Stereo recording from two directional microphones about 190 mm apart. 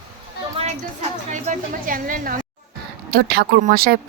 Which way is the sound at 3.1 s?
55° right (ahead or behind).